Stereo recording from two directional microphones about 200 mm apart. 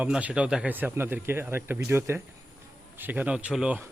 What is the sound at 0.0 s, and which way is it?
Speech, 5° right (ahead or behind).